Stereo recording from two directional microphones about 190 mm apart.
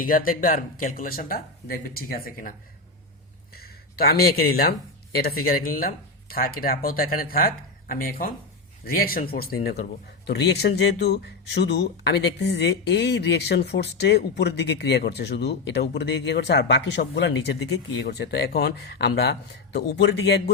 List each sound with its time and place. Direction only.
0.0 s speech: 50° left (ahead or behind)
3.5 s a sound: 55° left (ahead or behind)
5.1 s speech: 55° left (ahead or behind)